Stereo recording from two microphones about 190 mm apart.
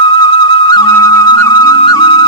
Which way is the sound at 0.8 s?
20° left (ahead or behind).